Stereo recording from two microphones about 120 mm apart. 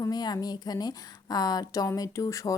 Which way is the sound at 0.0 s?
35° left (ahead or behind).